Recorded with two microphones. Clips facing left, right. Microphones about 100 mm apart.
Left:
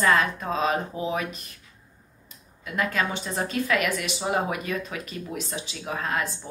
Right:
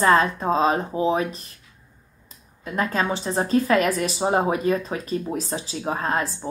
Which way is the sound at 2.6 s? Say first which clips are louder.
Right 3 dB; 30° right (ahead or behind).